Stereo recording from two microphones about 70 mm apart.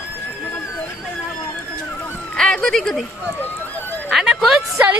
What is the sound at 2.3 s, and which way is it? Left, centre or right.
Speech, centre.